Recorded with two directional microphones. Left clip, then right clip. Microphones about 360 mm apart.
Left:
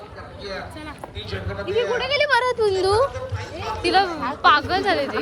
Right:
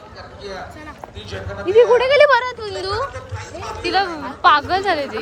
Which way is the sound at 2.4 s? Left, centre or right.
Centre.